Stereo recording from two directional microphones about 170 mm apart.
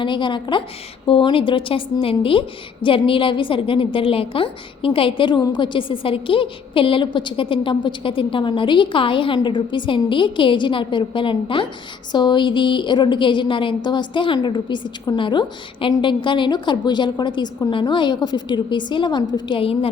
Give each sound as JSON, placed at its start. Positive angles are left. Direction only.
{"t": 0.0, "sound": "a woman's voice", "side_deg": 30}